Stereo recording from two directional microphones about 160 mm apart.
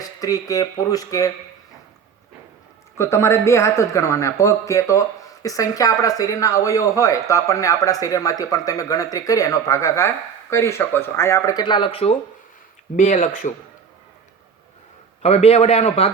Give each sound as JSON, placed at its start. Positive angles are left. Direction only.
{"t": 0.0, "sound": "a man's voice", "side_deg": 20}
{"t": 3.0, "sound": "a man's voice", "side_deg": 15}
{"t": 13.0, "sound": "speech", "side_deg": 50}
{"t": 15.2, "sound": "a man's voice", "side_deg": 40}